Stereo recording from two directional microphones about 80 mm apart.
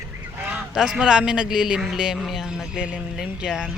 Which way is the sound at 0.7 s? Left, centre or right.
Centre.